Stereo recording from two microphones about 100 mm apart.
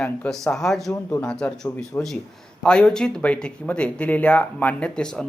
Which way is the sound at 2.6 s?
10° left (ahead or behind).